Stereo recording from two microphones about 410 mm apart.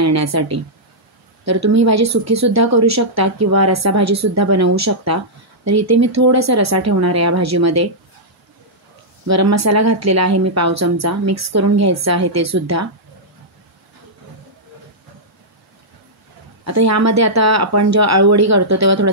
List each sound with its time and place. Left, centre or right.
0.0 s a woman's voice: right
9.3 s a woman's voice: right
16.6 s a woman's voice: right